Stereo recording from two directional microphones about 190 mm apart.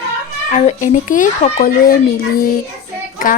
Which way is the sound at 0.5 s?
35° left (ahead or behind).